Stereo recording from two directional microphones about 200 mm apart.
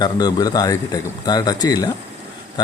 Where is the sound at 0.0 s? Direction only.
20° left (ahead or behind).